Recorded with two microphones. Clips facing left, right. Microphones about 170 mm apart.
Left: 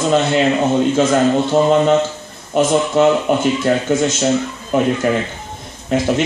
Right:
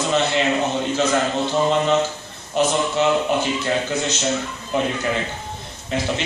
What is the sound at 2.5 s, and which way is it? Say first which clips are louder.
A man's voice: left 6 dB; 55° left (ahead or behind).